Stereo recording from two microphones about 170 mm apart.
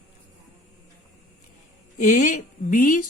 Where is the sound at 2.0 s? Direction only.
45° left (ahead or behind).